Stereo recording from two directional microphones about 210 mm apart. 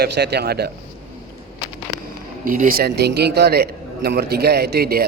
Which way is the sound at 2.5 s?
40° right (ahead or behind).